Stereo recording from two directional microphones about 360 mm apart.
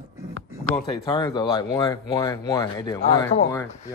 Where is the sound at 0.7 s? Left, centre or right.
Centre.